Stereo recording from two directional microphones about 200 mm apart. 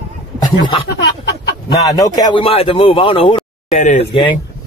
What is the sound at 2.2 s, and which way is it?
Speech, 25° left (ahead or behind).